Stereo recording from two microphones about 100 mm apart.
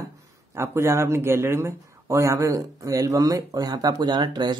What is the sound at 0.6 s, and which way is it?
Speech, 30° right (ahead or behind).